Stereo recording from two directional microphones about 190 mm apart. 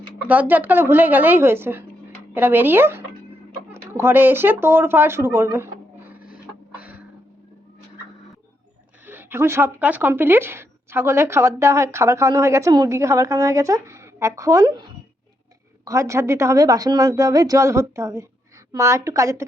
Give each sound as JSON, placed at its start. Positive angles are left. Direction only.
{"t": 0.3, "sound": "speech", "side_deg": -10}
{"t": 6.1, "sound": "printer", "side_deg": -10}
{"t": 9.0, "sound": "speech", "side_deg": -10}